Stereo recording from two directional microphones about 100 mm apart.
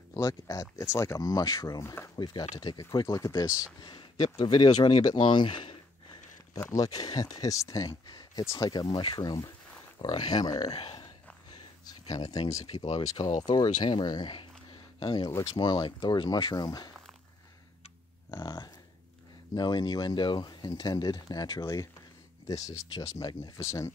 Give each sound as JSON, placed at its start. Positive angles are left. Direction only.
{"t": 0.1, "sound": "speech", "side_deg": 35}
{"t": 2.1, "sound": "speech", "side_deg": 50}
{"t": 3.8, "sound": "speech", "side_deg": 55}
{"t": 4.6, "sound": "speech", "side_deg": 45}
{"t": 6.7, "sound": "speech", "side_deg": 40}
{"t": 8.1, "sound": "a sound", "side_deg": 45}
{"t": 8.5, "sound": "speech", "side_deg": 45}
{"t": 8.8, "sound": "speech", "side_deg": 60}
{"t": 11.8, "sound": "speech", "side_deg": 40}
{"t": 18.4, "sound": "speech", "side_deg": 45}